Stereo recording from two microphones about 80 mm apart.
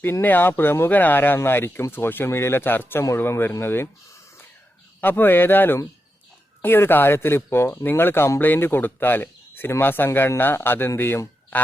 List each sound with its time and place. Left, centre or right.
0.0 s speech: left
4.9 s speech: left